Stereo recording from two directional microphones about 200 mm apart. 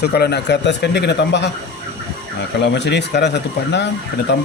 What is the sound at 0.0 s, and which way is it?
Speech, 55° left (ahead or behind).